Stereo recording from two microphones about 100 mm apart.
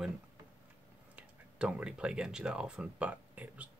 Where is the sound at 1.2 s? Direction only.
10° right (ahead or behind).